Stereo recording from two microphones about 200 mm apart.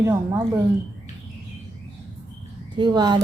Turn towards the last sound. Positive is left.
turn(degrees=-20)  # may be behind; listen again after turning